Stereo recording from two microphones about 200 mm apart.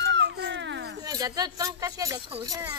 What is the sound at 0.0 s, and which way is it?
Baby cry, 60° right (ahead or behind).